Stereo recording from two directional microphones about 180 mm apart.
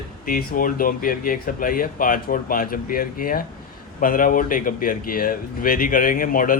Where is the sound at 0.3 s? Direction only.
55° left (ahead or behind).